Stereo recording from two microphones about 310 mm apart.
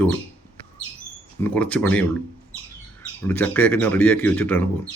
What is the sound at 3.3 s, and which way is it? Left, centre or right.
Speech, centre.